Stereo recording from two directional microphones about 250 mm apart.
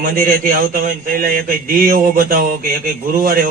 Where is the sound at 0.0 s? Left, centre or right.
Right.